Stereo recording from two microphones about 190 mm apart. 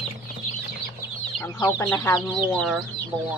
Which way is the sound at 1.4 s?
15° left (ahead or behind).